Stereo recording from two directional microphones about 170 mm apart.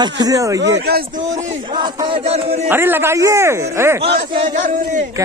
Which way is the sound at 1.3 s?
45° right (ahead or behind).